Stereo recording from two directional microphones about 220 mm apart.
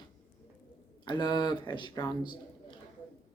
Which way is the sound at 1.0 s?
20° left (ahead or behind).